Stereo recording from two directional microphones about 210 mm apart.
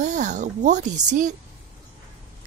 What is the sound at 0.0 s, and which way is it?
Speech, 35° right (ahead or behind).